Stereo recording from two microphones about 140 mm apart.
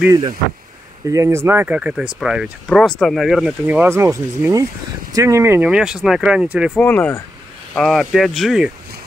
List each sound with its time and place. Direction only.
1.0 s speech: 20° right (ahead or behind)
5.7 s speech: 5° right (ahead or behind)
6.8 s speech: 10° left (ahead or behind)
7.7 s speech: centre (ahead or behind)